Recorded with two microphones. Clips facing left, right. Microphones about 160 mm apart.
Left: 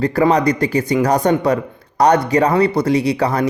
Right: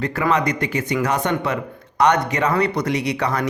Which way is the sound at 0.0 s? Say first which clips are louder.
Left 6 dB; 35° left (ahead or behind).